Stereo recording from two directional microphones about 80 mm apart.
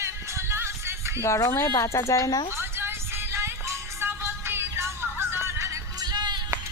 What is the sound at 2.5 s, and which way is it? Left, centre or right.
Music, right.